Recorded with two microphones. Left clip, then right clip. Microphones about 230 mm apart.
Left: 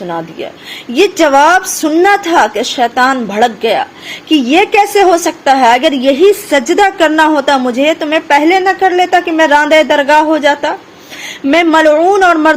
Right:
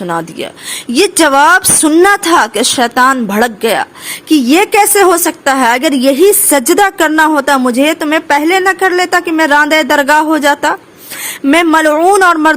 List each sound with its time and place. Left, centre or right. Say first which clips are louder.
0.1 s a woman's voice: right 4 dB; right